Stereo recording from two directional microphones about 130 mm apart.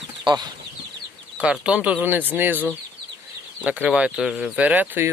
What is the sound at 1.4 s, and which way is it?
Speech, 10° right (ahead or behind).